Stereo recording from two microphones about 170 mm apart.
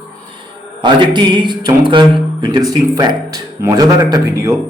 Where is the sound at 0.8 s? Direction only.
25° right (ahead or behind).